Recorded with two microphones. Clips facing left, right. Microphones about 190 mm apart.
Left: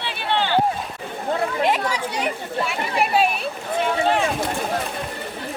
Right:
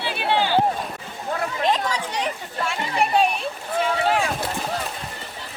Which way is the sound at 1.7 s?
10° left (ahead or behind).